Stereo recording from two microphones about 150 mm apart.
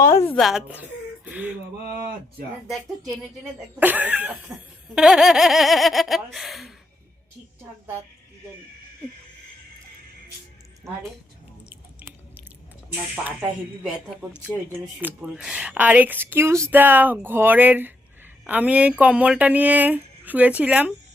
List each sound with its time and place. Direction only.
0.0 s a woman's voice: 20° left (ahead or behind)
0.3 s a woman's voice: centre (ahead or behind)
2.6 s laughter: centre (ahead or behind)
3.8 s speech: 10° right (ahead or behind)
4.9 s laughter: 5° right (ahead or behind)
7.6 s a woman's voice: 15° right (ahead or behind)
11.7 s chewing: 15° right (ahead or behind)
12.9 s speech: 15° right (ahead or behind)
15.0 s speech: 5° right (ahead or behind)